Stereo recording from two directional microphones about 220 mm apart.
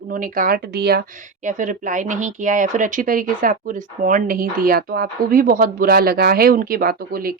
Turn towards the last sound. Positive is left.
turn(degrees=-40)  # may be behind; listen again after turning